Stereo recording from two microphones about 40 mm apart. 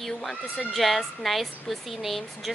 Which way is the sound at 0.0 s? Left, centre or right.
Centre.